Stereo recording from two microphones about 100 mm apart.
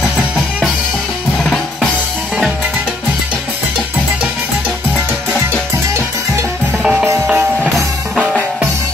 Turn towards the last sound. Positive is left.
turn(degrees=-15)  # may be behind; listen again after turning